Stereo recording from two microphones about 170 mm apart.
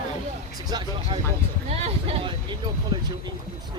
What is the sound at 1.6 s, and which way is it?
Speech, 35° right (ahead or behind).